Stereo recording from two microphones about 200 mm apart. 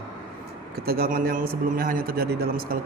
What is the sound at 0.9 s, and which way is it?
A man's voice, 50° right (ahead or behind).